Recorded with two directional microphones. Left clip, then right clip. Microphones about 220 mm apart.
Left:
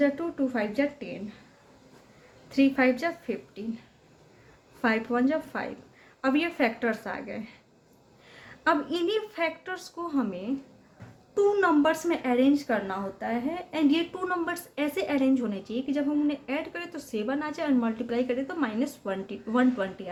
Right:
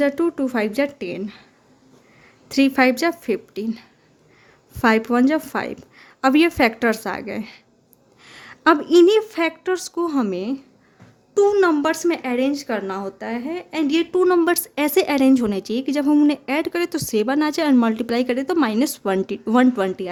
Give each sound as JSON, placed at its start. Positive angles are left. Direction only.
{"t": 0.0, "sound": "a woman's voice", "side_deg": -60}
{"t": 2.5, "sound": "a woman's voice", "side_deg": -60}